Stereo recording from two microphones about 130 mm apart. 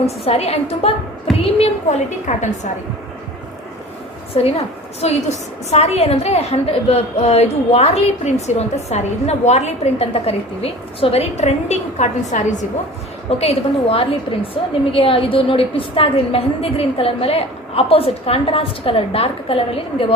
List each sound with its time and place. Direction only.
0.3 s a woman's voice: 50° left (ahead or behind)
4.4 s a woman's voice: 50° left (ahead or behind); by 12.6 s 70° left (ahead or behind)
13.4 s a woman's voice: 50° left (ahead or behind)